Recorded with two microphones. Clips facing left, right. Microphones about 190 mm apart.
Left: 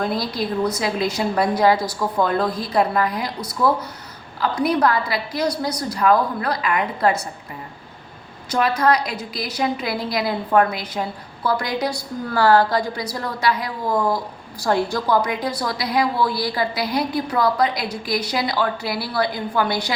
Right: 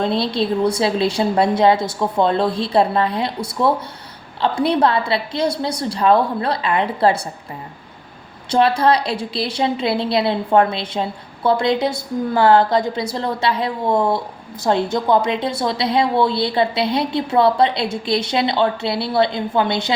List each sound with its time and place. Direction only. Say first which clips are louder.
0.0 s a woman's voice: right 4 dB; 25° right (ahead or behind)
8.4 s a woman's voice: right 3 dB; 30° right (ahead or behind)